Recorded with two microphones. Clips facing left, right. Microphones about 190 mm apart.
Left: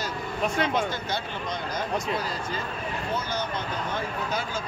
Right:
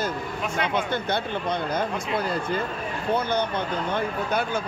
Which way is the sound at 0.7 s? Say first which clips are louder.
Right 2 dB; 60° right (ahead or behind).